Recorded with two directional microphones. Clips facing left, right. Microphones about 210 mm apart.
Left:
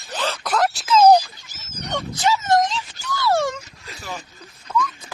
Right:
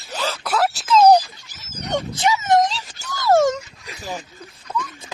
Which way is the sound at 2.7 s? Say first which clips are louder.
Left 3 dB; 40° right (ahead or behind).